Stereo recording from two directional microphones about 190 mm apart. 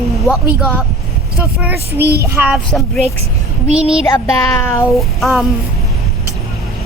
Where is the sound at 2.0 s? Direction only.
55° right (ahead or behind).